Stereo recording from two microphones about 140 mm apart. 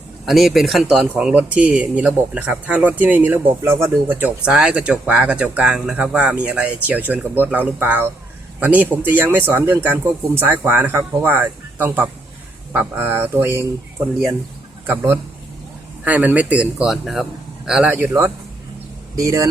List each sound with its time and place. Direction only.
0.3 s speech: centre (ahead or behind); by 13.7 s 15° right (ahead or behind)
14.8 s speech: 15° right (ahead or behind)